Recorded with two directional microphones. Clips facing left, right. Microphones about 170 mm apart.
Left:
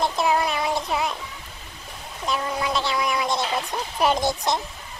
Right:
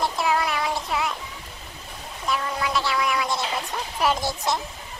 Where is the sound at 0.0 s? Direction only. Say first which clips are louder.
Left 2 dB; 20° left (ahead or behind).